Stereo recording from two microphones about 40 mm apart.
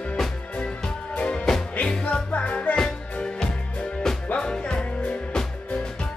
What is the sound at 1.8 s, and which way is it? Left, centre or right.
Music, left.